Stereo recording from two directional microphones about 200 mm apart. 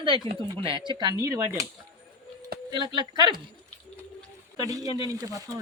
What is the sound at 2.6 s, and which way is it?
Speech, 20° right (ahead or behind).